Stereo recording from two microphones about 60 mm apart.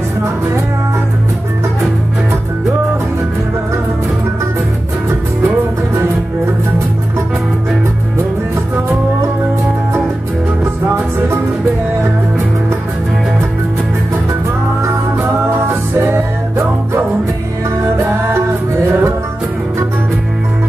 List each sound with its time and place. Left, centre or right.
15.5 s music: right